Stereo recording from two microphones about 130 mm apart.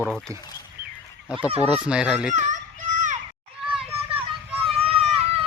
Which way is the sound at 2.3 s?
70° right (ahead or behind).